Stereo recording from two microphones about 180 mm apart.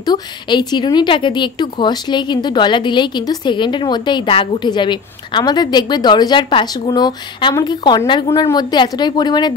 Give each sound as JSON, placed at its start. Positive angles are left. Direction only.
{"t": 0.0, "sound": "speech", "side_deg": 25}